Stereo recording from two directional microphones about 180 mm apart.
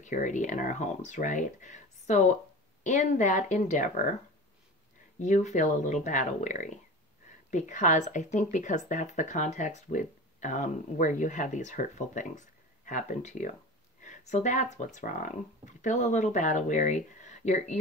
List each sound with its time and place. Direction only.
0.0 s speech: 45° left (ahead or behind)
5.2 s speech: 40° left (ahead or behind)